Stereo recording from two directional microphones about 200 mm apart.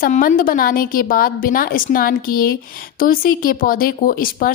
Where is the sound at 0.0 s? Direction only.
45° left (ahead or behind).